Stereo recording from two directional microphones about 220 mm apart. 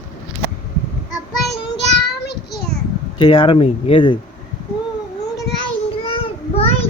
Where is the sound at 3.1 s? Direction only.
20° left (ahead or behind).